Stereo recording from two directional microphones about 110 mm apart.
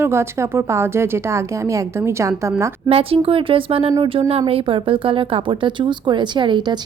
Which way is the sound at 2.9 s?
60° right (ahead or behind).